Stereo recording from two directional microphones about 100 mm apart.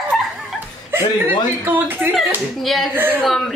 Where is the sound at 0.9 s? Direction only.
20° right (ahead or behind).